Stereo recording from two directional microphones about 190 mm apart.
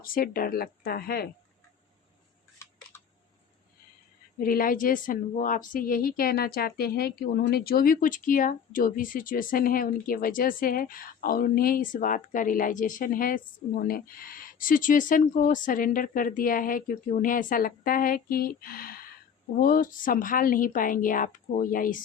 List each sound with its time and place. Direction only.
0.0 s speech: 50° left (ahead or behind)
2.6 s camera: 15° left (ahead or behind)
4.4 s speech: 50° left (ahead or behind)